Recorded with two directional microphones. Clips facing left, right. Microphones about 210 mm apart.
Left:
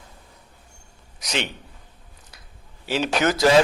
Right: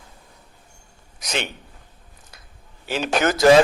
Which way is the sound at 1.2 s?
50° right (ahead or behind).